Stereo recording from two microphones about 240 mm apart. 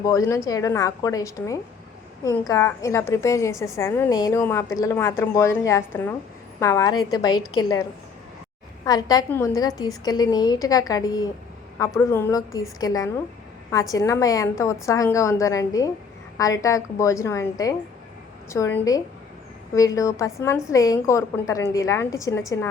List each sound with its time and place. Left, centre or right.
0.0 s a woman's voice: centre